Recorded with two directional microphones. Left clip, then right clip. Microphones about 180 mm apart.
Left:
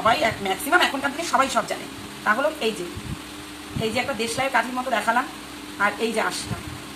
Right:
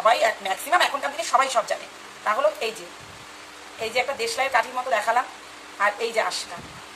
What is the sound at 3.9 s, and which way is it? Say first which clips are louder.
A woman's voice: right 2 dB; 25° right (ahead or behind).